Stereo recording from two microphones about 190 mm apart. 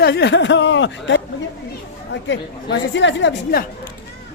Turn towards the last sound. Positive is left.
turn(degrees=70)  # may be behind; listen again after turning